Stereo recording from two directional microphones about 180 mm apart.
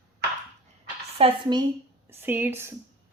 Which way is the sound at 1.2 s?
30° right (ahead or behind).